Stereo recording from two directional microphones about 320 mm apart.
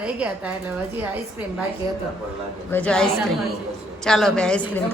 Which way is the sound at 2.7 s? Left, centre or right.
Centre.